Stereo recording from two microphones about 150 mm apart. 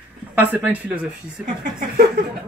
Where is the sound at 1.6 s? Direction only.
75° right (ahead or behind).